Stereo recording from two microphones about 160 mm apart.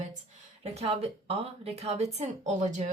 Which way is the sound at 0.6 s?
40° right (ahead or behind).